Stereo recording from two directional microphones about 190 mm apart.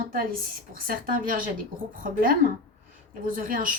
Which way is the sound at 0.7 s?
50° right (ahead or behind).